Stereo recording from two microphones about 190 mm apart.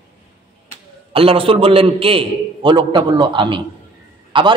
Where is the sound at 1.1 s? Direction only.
30° right (ahead or behind).